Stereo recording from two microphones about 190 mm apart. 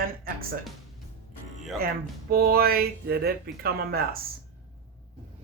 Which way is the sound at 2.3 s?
55° right (ahead or behind).